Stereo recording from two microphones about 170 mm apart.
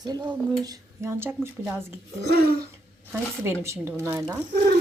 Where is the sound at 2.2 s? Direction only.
70° right (ahead or behind).